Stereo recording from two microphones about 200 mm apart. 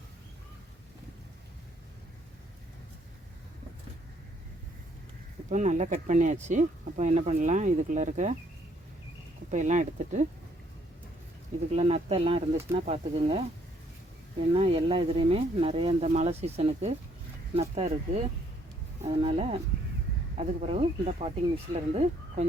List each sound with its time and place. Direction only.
5.5 s speech: 35° right (ahead or behind)
9.5 s speech: 35° right (ahead or behind)
11.7 s speech: 35° right (ahead or behind)
14.5 s speech: 30° right (ahead or behind)